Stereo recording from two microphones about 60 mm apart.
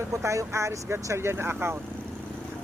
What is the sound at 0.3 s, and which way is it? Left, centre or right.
Speech, right.